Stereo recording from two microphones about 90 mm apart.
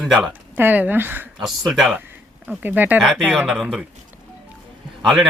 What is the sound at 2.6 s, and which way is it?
Speech, 20° right (ahead or behind).